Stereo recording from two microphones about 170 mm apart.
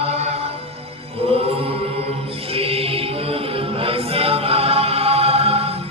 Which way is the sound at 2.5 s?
35° right (ahead or behind).